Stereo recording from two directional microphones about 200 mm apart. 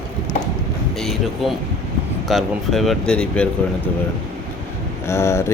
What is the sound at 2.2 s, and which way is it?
Speech, centre (ahead or behind).